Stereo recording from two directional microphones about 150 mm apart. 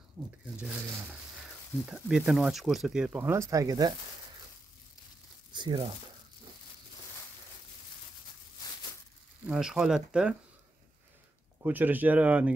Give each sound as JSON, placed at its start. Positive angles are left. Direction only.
{"t": 0.2, "sound": "speech", "side_deg": -15}
{"t": 1.9, "sound": "speech", "side_deg": -5}
{"t": 5.5, "sound": "speech", "side_deg": -30}
{"t": 9.5, "sound": "speech", "side_deg": -5}
{"t": 11.6, "sound": "speech", "side_deg": -10}